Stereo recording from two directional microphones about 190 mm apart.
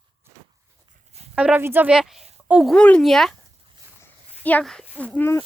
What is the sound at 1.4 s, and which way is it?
A woman's voice, 5° right (ahead or behind).